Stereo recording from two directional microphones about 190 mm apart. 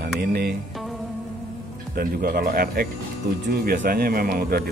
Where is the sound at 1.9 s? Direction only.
50° right (ahead or behind).